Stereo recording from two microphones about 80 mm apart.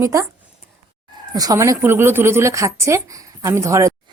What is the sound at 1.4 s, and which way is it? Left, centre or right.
A woman's voice, right.